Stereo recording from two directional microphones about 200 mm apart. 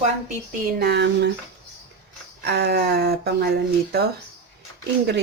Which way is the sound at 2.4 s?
55° right (ahead or behind).